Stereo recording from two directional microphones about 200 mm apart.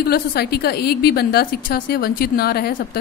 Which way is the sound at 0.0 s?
50° left (ahead or behind).